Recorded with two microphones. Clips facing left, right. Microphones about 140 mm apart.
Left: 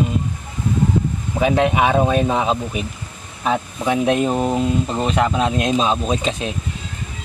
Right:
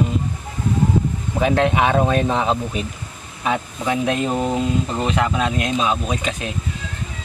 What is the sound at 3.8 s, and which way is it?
Speech, 25° left (ahead or behind).